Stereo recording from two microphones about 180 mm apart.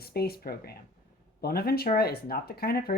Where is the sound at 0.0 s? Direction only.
60° left (ahead or behind).